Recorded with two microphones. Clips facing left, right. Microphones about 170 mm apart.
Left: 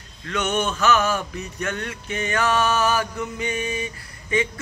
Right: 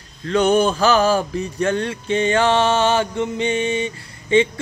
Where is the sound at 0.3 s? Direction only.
35° right (ahead or behind).